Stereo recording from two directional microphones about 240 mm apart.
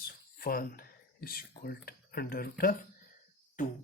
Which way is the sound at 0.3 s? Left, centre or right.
Left.